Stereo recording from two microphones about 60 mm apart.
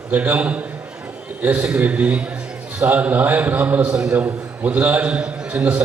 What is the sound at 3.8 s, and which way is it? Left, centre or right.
Speech, centre.